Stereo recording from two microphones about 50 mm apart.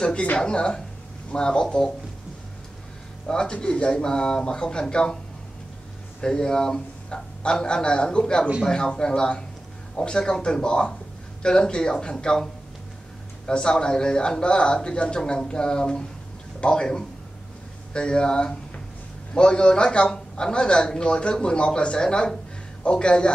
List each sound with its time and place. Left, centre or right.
0.0 s a man's voice: left
3.3 s a man's voice: centre
6.2 s a man's voice: centre
13.5 s a man's voice: centre